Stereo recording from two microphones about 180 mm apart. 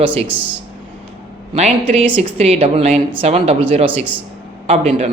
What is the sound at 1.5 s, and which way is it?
Speech, 35° right (ahead or behind).